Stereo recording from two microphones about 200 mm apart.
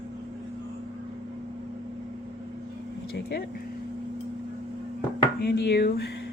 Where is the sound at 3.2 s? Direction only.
55° left (ahead or behind).